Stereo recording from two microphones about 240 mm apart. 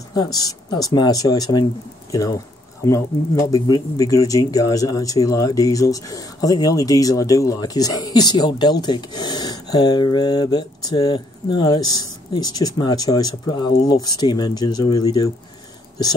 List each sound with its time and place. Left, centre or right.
0.1 s speech: centre